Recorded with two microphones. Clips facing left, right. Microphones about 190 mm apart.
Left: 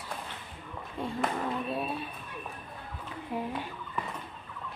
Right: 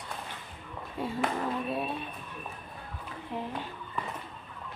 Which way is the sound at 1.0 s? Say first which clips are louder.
Right 1 dB; centre (ahead or behind).